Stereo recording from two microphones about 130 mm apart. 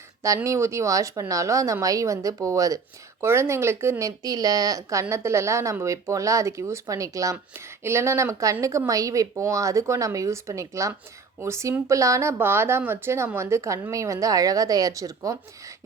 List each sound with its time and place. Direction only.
0.4 s a woman's voice: 20° right (ahead or behind)